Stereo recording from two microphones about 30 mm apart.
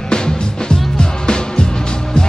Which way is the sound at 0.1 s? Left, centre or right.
Left.